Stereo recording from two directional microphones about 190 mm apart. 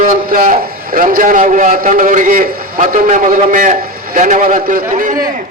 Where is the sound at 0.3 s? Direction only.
45° right (ahead or behind).